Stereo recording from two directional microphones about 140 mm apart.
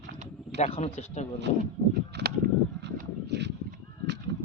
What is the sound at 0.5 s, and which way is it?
Speech, 50° left (ahead or behind).